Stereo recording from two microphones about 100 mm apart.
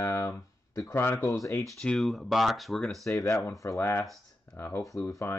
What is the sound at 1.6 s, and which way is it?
Speech, 5° left (ahead or behind).